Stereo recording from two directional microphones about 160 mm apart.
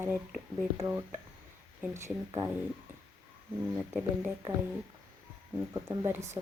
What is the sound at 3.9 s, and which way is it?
Speech, 15° right (ahead or behind).